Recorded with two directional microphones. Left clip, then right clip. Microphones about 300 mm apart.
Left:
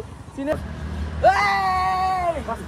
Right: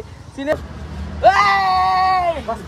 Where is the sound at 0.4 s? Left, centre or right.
Centre.